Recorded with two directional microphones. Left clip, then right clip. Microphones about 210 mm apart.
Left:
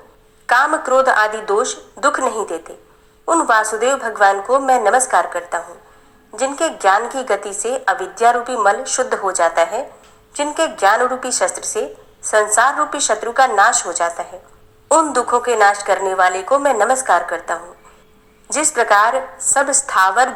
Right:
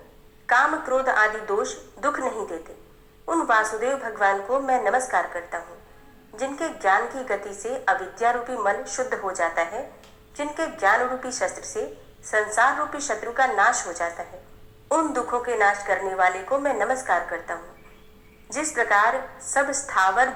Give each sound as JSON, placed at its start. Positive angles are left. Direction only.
{"t": 0.4, "sound": "a woman's voice", "side_deg": 25}